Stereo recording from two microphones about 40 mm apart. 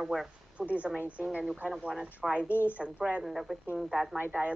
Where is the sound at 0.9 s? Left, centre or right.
Right.